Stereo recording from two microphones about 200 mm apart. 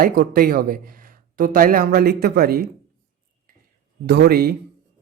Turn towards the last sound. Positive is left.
turn(degrees=-50)  # may be behind; listen again after turning